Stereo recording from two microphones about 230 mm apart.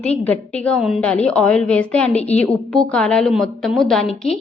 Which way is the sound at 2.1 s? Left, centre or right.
Left.